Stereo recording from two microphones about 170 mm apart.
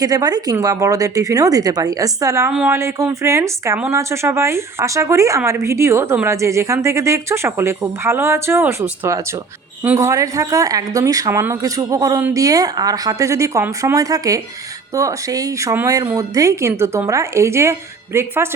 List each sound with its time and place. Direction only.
0.0 s speech: 20° right (ahead or behind)
2.5 s speech: 5° right (ahead or behind)
2.7 s a woman's voice: 15° right (ahead or behind)